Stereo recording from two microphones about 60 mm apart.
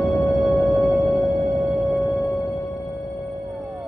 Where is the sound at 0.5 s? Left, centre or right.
Centre.